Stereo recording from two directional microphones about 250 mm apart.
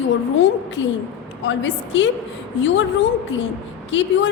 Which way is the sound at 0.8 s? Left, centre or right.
Left.